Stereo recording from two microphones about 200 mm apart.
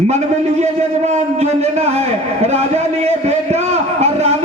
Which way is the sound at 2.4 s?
35° right (ahead or behind).